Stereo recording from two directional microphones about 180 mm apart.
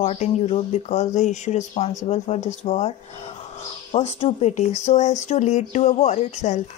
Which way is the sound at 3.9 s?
35° left (ahead or behind).